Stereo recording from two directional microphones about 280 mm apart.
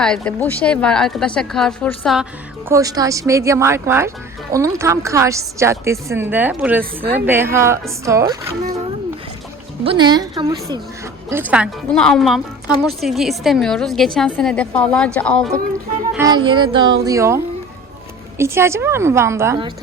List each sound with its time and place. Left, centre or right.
0.0 s a woman's voice: centre
2.6 s a woman's voice: centre
9.8 s a woman's voice: centre
16.1 s a woman's voice: centre